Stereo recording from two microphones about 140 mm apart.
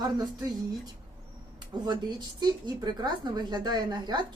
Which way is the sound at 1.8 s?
30° right (ahead or behind).